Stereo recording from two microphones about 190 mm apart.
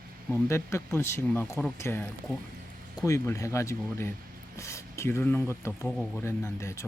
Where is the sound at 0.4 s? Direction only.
15° left (ahead or behind).